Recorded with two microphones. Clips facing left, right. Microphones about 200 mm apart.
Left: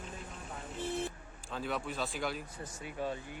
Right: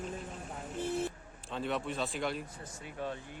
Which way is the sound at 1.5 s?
Centre (ahead or behind).